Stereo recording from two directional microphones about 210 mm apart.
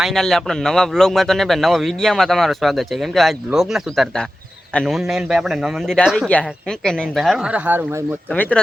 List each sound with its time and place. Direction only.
0.0 s speech: centre (ahead or behind)
8.3 s speech: 5° left (ahead or behind)